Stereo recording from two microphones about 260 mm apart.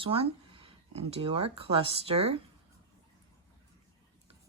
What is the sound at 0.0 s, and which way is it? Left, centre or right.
Speech, right.